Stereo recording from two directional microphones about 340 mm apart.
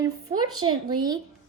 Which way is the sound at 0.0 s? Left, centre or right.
Centre.